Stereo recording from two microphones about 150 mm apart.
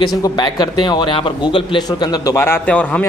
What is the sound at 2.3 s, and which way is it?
Speech, 15° left (ahead or behind).